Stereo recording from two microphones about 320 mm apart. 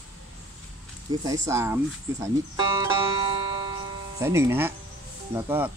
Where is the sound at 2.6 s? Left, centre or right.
Centre.